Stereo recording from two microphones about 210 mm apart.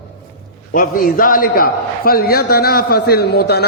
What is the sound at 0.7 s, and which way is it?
A man's voice, 40° left (ahead or behind).